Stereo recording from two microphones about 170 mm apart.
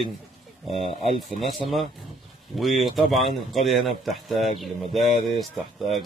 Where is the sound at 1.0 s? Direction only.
30° right (ahead or behind).